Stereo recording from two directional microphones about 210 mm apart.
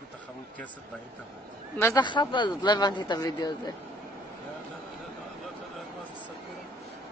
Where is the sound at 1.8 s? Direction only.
20° left (ahead or behind).